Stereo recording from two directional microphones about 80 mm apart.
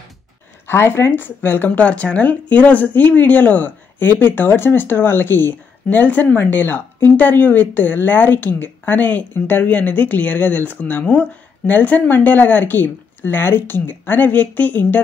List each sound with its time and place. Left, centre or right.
0.7 s speech: left